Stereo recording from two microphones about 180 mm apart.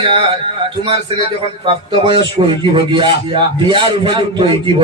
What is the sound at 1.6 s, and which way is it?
A man's voice, 30° right (ahead or behind).